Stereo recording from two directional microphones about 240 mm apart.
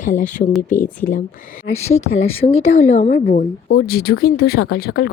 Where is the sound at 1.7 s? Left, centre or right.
Left.